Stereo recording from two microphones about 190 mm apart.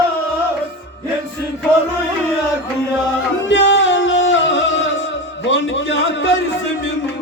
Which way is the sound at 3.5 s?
70° left (ahead or behind).